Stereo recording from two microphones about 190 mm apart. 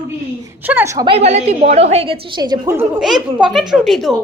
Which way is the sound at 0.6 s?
10° right (ahead or behind).